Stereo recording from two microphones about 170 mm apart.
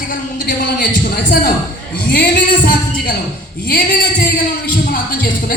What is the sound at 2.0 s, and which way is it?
Speech, 65° left (ahead or behind).